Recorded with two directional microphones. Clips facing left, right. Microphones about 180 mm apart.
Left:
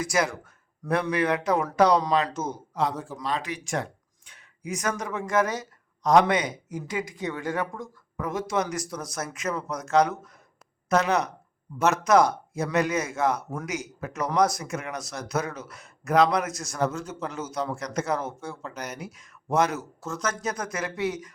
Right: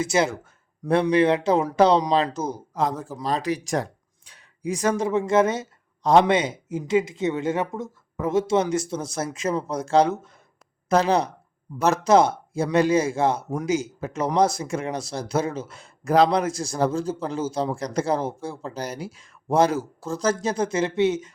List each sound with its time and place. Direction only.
0.0 s speech: 25° right (ahead or behind)